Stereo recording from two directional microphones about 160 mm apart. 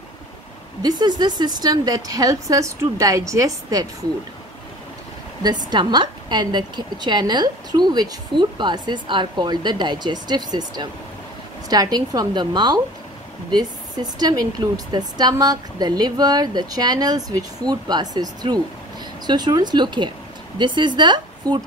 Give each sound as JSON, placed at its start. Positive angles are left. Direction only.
{"t": 0.8, "sound": "a woman's voice", "side_deg": -25}
{"t": 5.4, "sound": "a woman's voice", "side_deg": -25}